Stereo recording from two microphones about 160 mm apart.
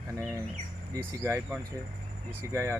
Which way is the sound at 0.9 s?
15° right (ahead or behind).